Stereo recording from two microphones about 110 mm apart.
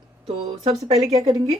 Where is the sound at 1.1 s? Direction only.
35° right (ahead or behind).